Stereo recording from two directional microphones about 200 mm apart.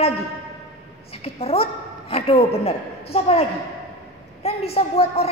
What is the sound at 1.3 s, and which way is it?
A woman's voice, 30° left (ahead or behind).